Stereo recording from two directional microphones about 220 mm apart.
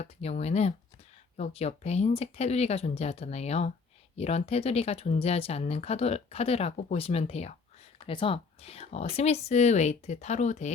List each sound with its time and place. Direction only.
0.0 s speech: 30° left (ahead or behind)